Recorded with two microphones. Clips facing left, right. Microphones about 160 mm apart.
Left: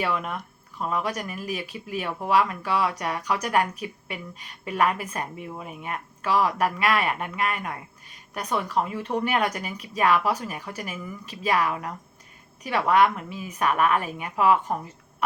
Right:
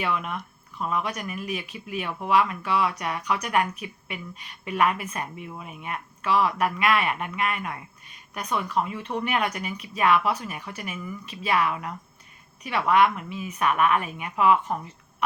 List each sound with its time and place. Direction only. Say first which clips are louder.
0.0 s a woman's voice: left 1 dB; 35° left (ahead or behind)